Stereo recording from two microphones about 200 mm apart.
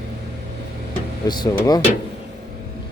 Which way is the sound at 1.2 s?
20° left (ahead or behind).